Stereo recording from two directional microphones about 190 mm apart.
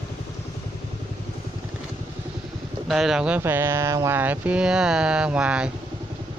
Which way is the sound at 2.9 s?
Centre (ahead or behind).